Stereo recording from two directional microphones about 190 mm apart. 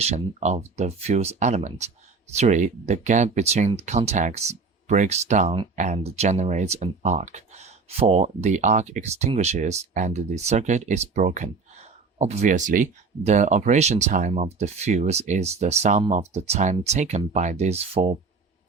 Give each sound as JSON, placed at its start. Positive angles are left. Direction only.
{"t": 0.0, "sound": "speech", "side_deg": -35}